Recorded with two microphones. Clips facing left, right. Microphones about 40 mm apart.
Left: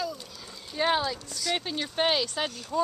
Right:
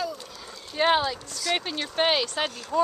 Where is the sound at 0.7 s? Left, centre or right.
Right.